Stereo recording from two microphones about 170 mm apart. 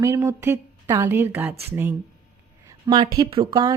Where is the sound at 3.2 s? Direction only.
25° right (ahead or behind).